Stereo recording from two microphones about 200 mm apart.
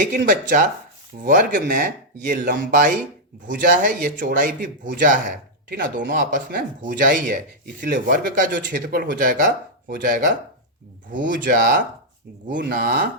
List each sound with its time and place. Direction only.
0.3 s a man's voice: 40° right (ahead or behind)